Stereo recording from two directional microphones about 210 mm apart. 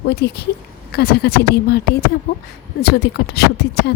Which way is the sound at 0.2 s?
50° left (ahead or behind).